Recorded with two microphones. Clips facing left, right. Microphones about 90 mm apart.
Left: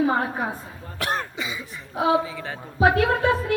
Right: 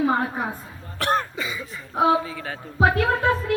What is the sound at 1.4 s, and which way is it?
A woman's voice, 15° left (ahead or behind).